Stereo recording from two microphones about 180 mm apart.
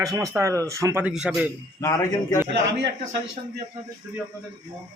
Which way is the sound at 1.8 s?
15° left (ahead or behind).